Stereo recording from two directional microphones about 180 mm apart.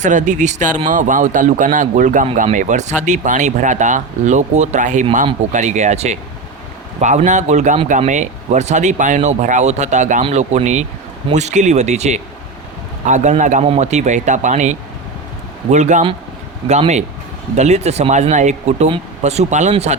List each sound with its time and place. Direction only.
0.0 s speech: 45° right (ahead or behind)